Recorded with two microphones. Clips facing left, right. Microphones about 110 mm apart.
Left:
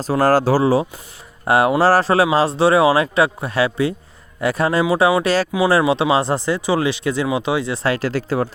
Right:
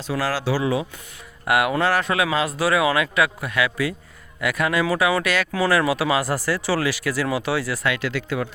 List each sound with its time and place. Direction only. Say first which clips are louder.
0.0 s a man's voice: left 9 dB; 40° left (ahead or behind)